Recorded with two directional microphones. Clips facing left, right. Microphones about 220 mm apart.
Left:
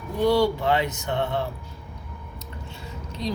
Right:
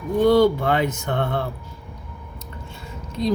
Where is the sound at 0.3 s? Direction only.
50° right (ahead or behind).